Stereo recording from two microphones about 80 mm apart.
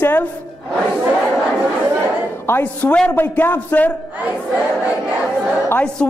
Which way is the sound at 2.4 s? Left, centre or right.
Left.